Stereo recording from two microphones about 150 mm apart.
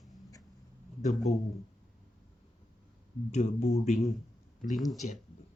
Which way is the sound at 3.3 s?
50° left (ahead or behind).